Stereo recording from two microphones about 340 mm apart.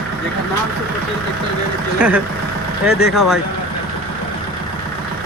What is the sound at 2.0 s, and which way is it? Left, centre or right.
Speech, centre.